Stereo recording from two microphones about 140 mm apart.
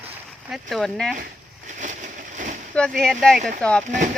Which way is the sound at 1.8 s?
65° right (ahead or behind).